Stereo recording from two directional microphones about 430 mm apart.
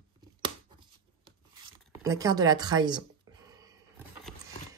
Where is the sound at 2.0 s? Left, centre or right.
Centre.